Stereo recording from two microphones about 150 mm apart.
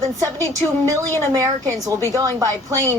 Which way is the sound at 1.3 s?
20° right (ahead or behind).